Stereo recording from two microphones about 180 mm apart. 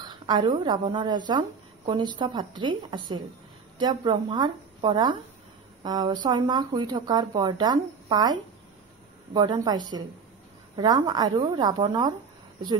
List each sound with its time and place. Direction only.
0.0 s a woman's voice: 25° right (ahead or behind)
10.8 s speech: 25° right (ahead or behind)